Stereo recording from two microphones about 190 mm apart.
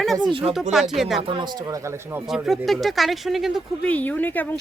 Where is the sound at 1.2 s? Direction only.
25° right (ahead or behind).